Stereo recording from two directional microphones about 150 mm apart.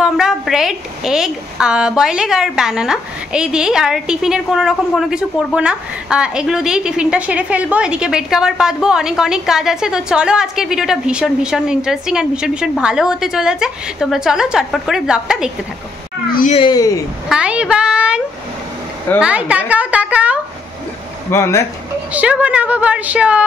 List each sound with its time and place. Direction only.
0.0 s a woman's voice: 5° right (ahead or behind)
16.5 s speech: 30° left (ahead or behind)
17.3 s a woman's voice: 5° right (ahead or behind)
19.2 s a woman's voice: 10° right (ahead or behind)
21.3 s speech: 20° left (ahead or behind)
22.1 s a woman's voice: 10° right (ahead or behind)